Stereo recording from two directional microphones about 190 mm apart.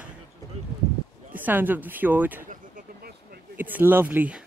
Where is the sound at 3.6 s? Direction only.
10° right (ahead or behind).